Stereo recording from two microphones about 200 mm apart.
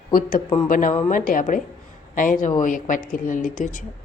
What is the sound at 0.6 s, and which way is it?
A woman's voice, 40° left (ahead or behind).